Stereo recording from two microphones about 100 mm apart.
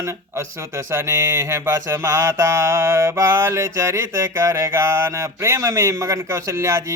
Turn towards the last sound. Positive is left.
turn(degrees=-25)  # may be behind; listen again after turning